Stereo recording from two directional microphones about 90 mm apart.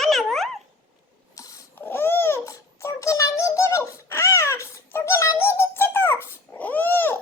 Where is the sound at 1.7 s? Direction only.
25° left (ahead or behind).